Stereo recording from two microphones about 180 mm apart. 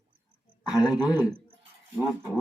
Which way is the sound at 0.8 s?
20° left (ahead or behind).